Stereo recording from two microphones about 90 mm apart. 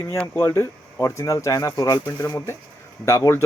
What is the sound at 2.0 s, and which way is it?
Speech, 25° left (ahead or behind).